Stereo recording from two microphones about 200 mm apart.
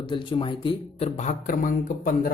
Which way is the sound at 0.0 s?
25° left (ahead or behind).